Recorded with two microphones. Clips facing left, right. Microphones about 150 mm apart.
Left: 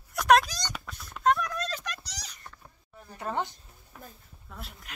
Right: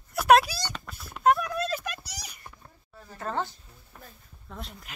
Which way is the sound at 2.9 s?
15° left (ahead or behind).